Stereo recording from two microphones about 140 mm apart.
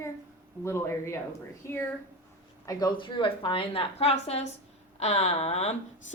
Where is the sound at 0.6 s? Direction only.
20° left (ahead or behind).